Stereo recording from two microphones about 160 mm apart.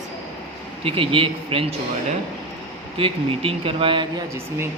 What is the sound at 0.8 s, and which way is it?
Speech, 35° right (ahead or behind).